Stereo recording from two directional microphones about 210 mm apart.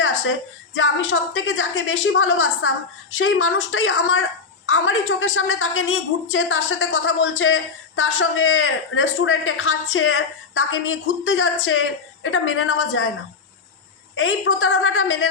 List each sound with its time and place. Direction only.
0.8 s a woman's voice: 70° left (ahead or behind)
14.2 s a woman's voice: 70° left (ahead or behind)